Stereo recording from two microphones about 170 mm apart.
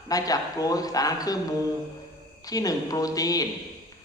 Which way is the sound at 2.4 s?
20° left (ahead or behind).